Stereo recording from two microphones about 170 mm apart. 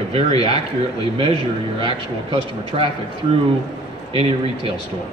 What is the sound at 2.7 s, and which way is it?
Speech, 35° right (ahead or behind).